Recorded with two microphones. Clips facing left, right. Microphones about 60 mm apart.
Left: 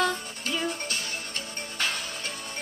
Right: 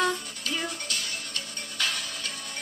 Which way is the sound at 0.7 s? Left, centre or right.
Left.